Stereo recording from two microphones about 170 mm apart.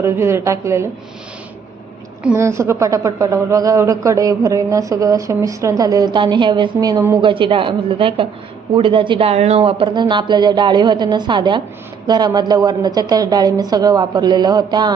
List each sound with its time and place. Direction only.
0.0 s a woman's voice: 15° right (ahead or behind)
2.2 s a woman's voice: 15° right (ahead or behind)